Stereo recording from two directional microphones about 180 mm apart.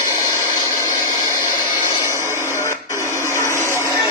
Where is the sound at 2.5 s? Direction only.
15° left (ahead or behind).